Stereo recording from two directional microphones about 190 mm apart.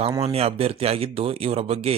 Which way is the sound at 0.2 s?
30° right (ahead or behind).